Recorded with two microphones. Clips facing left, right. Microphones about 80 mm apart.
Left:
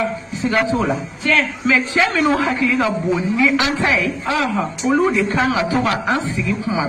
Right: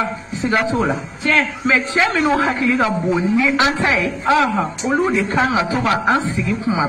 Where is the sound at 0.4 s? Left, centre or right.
Right.